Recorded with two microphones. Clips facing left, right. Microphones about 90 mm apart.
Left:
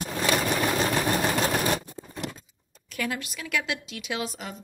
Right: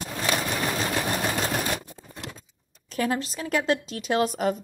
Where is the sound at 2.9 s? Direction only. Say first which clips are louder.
Right 5 dB; 35° right (ahead or behind); by 4.5 s 50° right (ahead or behind).